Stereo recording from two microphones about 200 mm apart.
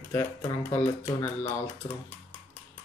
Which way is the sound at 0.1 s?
10° left (ahead or behind).